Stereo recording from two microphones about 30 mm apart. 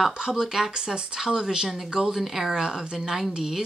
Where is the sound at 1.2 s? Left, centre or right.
Centre.